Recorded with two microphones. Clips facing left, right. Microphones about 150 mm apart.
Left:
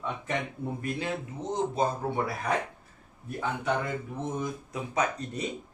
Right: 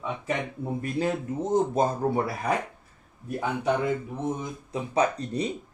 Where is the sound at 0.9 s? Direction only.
45° right (ahead or behind).